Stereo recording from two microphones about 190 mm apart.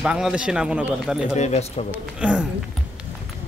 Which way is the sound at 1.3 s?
35° left (ahead or behind).